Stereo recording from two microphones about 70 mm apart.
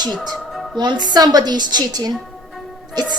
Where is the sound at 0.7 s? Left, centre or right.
Right.